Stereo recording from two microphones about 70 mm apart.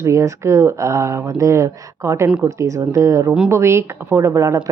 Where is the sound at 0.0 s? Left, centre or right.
Right.